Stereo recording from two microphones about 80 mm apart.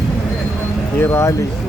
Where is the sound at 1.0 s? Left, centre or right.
Left.